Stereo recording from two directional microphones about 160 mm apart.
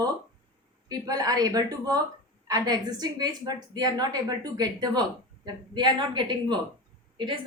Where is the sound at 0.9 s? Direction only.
25° right (ahead or behind).